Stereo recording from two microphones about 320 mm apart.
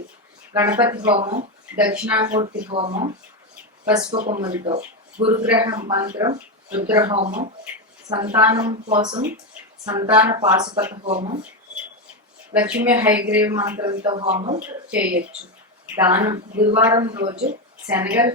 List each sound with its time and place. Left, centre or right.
0.5 s speech: centre
7.0 s speech: centre
12.5 s speech: centre